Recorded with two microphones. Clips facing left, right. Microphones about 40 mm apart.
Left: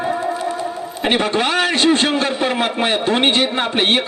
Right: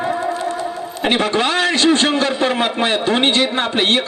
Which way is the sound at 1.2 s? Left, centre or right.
Centre.